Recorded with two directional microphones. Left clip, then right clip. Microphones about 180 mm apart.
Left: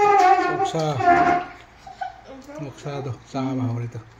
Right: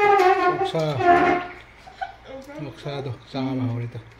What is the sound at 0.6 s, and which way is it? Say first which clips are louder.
Speech: left 1 dB; centre (ahead or behind).